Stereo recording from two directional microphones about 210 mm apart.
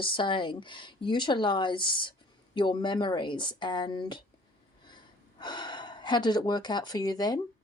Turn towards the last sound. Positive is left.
turn(degrees=20)  # may be behind; listen again after turning